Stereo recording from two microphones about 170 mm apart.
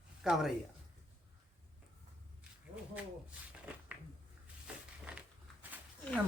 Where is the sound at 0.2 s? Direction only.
Centre (ahead or behind).